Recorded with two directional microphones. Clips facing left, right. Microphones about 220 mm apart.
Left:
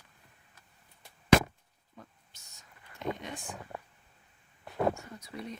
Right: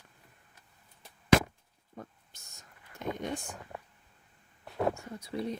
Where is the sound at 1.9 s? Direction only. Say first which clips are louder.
Right 7 dB; 50° right (ahead or behind).